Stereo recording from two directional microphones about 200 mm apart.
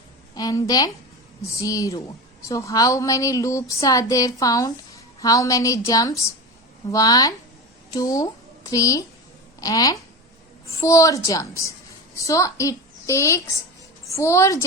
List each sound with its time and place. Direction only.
0.3 s a woman's voice: 20° left (ahead or behind)